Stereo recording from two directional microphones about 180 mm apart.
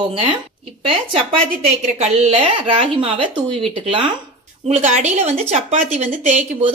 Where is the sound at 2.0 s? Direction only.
35° right (ahead or behind).